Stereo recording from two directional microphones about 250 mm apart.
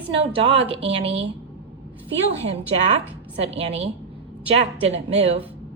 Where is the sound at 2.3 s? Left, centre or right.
Right.